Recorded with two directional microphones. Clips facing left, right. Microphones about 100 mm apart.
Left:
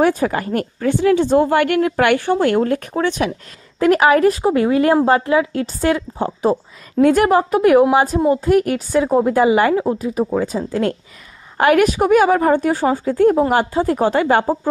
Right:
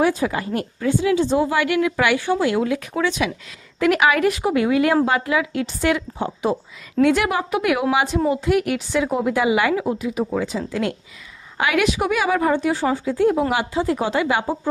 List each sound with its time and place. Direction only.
0.0 s a woman's voice: 50° left (ahead or behind)
3.8 s a woman's voice: 35° left (ahead or behind)